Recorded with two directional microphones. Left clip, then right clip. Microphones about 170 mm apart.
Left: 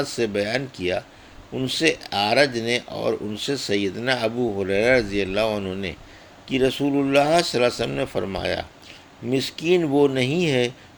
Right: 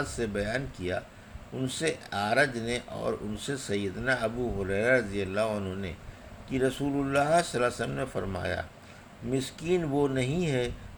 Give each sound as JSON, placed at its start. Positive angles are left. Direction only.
{"t": 0.0, "sound": "speech", "side_deg": 40}
{"t": 6.8, "sound": "speech", "side_deg": 55}